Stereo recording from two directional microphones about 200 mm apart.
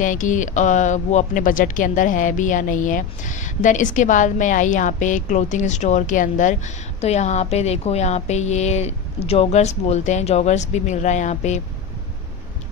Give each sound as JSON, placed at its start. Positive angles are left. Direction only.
{"t": 0.0, "sound": "speech", "side_deg": 40}